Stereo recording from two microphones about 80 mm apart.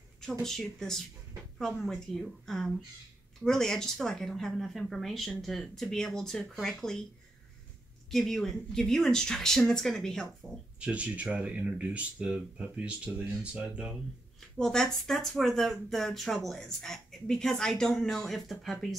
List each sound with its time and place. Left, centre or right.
0.2 s speech: centre
8.1 s speech: centre
10.4 s speech: right
10.8 s speech: centre
14.6 s speech: centre